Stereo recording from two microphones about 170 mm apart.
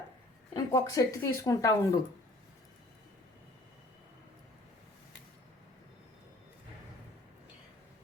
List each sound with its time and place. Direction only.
0.5 s speech: 20° left (ahead or behind)